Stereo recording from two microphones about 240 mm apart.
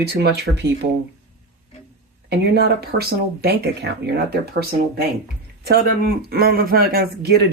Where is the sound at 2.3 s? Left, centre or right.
Right.